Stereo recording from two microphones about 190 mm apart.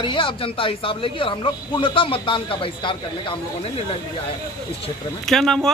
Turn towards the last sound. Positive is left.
turn(degrees=0)  # may be behind; listen again after turning